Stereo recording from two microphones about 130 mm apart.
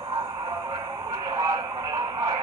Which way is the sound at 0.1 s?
35° right (ahead or behind).